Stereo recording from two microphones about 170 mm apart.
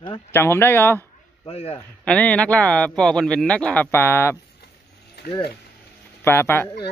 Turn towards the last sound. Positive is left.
turn(degrees=15)  # may be behind; listen again after turning